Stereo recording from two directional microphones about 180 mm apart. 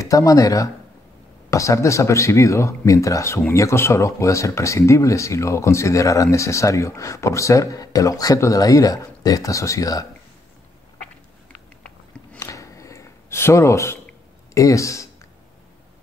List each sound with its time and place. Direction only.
0.0 s speech: 20° left (ahead or behind)
12.4 s a sound: 15° left (ahead or behind)
14.5 s speech: 15° left (ahead or behind)